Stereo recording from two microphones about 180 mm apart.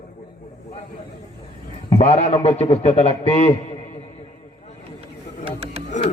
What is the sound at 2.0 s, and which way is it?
A man's voice, 35° left (ahead or behind).